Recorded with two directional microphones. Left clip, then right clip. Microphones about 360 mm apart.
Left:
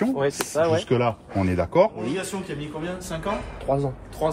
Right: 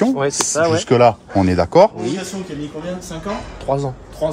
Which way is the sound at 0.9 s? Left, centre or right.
Centre.